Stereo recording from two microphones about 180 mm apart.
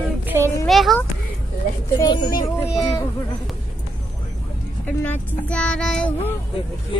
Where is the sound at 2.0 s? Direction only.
25° left (ahead or behind).